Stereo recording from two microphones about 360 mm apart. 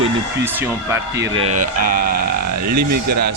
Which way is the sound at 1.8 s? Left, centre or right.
Right.